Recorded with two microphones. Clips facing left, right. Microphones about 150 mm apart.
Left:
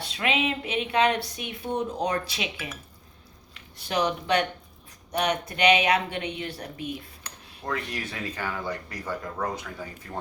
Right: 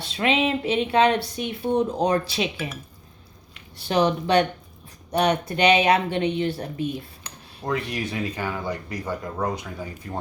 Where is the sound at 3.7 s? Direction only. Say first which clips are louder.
Right 5 dB; 30° right (ahead or behind).